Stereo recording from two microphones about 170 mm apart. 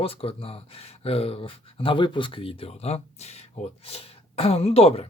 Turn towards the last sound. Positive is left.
turn(degrees=35)  # may be behind; listen again after turning